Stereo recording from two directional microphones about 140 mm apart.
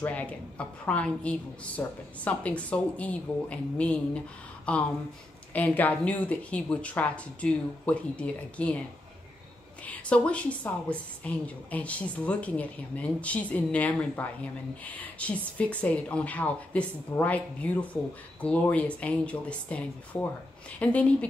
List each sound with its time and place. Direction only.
0.0 s a woman's voice: 10° left (ahead or behind)
9.8 s a woman's voice: 10° left (ahead or behind)